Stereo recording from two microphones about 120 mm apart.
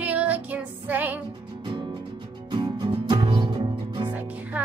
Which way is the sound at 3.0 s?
40° right (ahead or behind).